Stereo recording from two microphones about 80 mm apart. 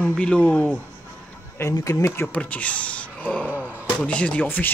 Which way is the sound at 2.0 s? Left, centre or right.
Left.